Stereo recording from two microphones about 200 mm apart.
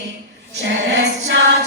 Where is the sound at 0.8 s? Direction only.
60° right (ahead or behind).